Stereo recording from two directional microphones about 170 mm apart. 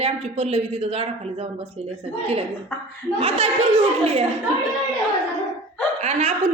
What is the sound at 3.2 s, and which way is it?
A man's voice, 35° right (ahead or behind).